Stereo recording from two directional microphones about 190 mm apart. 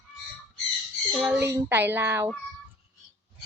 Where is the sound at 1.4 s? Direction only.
15° right (ahead or behind).